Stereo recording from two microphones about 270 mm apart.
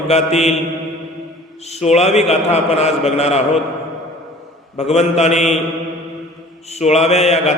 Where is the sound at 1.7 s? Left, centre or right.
Left.